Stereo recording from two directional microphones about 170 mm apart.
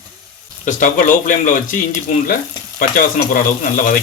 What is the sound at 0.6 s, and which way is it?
Speech, 50° left (ahead or behind).